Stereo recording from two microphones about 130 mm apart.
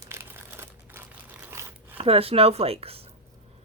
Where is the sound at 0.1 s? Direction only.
20° right (ahead or behind).